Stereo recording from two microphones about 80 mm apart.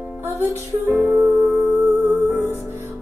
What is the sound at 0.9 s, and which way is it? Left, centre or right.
Music, right.